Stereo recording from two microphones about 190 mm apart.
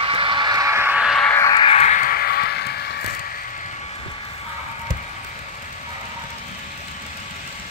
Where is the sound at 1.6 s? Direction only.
35° left (ahead or behind); by 3.2 s 55° left (ahead or behind).